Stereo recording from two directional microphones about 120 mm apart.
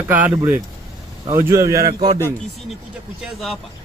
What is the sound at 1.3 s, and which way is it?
Speech, 25° right (ahead or behind).